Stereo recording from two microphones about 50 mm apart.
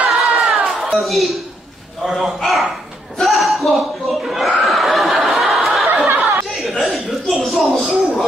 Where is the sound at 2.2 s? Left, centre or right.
Centre.